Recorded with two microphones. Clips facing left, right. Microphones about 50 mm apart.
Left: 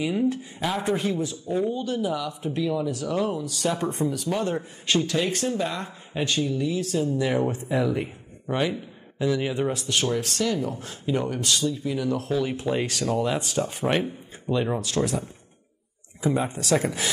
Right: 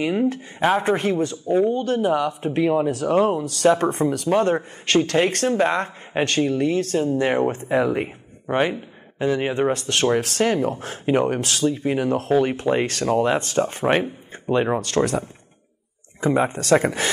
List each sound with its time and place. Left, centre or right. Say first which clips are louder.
0.3 s speech: right 7 dB; right
9.2 s speech: right 4 dB; right
16.2 s speech: right 5 dB; right